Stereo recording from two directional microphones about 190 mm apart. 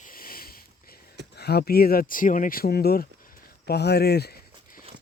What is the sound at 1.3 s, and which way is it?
Speech, 55° left (ahead or behind).